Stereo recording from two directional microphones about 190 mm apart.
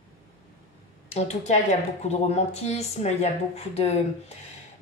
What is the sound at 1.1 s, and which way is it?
Speech, 35° left (ahead or behind).